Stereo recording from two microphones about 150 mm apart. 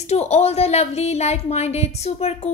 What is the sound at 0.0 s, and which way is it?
A woman's voice, 45° left (ahead or behind).